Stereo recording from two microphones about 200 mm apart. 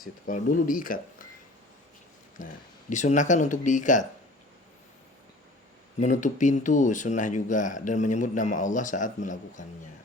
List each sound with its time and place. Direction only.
0.0 s speech: 45° left (ahead or behind)
2.4 s speech: 40° left (ahead or behind)
6.0 s speech: 40° left (ahead or behind)